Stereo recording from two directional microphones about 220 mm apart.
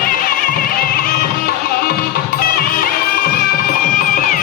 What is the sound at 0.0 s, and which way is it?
Music, 40° left (ahead or behind).